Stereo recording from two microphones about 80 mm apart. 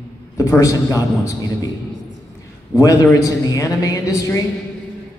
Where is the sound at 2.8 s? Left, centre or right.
Left.